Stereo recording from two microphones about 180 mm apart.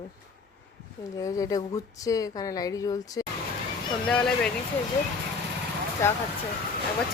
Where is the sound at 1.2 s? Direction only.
20° left (ahead or behind).